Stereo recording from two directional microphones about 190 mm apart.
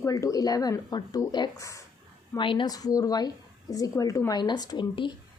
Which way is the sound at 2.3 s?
25° left (ahead or behind).